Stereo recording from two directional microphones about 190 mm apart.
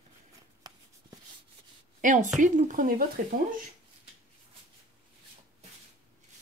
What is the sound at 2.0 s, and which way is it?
A woman's voice, 40° right (ahead or behind).